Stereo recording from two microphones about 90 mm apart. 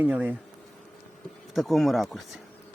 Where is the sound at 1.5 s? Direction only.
Centre (ahead or behind).